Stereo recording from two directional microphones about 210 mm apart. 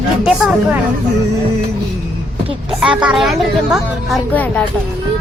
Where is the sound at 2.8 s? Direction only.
5° right (ahead or behind).